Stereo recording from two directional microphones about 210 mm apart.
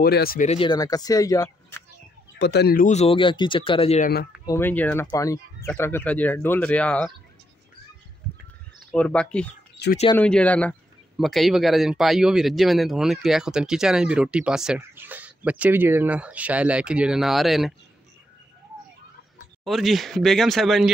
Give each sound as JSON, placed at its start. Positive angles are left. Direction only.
{"t": 0.0, "sound": "speech", "side_deg": 45}
{"t": 0.5, "sound": "speech", "side_deg": 25}
{"t": 2.3, "sound": "speech", "side_deg": 50}
{"t": 4.5, "sound": "speech", "side_deg": 10}
{"t": 8.9, "sound": "speech", "side_deg": 5}
{"t": 19.6, "sound": "speech", "side_deg": 0}